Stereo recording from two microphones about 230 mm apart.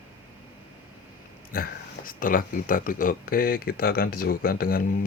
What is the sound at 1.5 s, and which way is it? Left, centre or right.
Speech, left.